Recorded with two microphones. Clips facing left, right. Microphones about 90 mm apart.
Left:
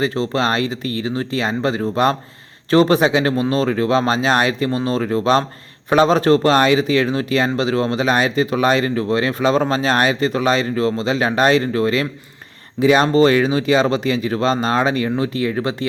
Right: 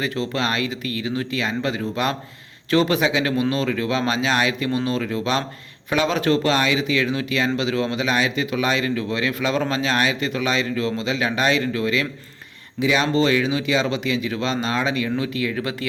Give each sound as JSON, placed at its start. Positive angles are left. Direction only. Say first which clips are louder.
{"t": 0.0, "sound": "speech", "louder": "left 5 dB", "side_deg": 35}